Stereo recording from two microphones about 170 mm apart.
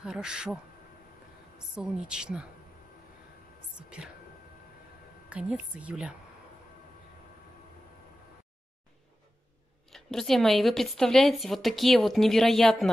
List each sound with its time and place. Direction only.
0.0 s speech: 5° right (ahead or behind)
1.8 s speech: 5° right (ahead or behind)
4.0 s a woman's voice: 5° right (ahead or behind)
5.3 s a woman's voice: 5° right (ahead or behind)
9.8 s speech: centre (ahead or behind)